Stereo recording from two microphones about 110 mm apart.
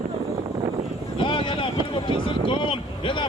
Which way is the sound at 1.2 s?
50° left (ahead or behind).